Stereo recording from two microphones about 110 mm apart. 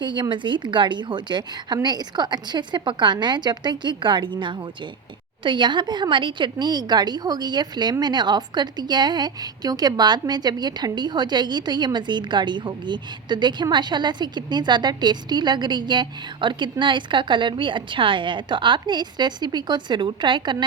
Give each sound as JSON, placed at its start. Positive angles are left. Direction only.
{"t": 0.0, "sound": "speech", "side_deg": -45}